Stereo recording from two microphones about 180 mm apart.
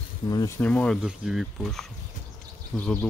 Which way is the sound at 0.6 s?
5° left (ahead or behind).